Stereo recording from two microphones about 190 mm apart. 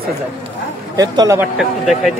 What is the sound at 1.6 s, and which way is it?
Speech, centre (ahead or behind).